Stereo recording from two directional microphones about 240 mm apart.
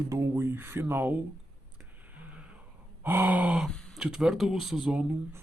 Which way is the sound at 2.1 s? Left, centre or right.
Centre.